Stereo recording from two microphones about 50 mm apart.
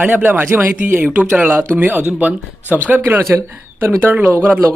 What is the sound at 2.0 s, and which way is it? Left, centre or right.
Speech, right.